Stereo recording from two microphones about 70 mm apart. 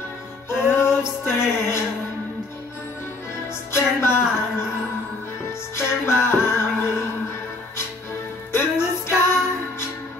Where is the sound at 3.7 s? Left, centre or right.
Left.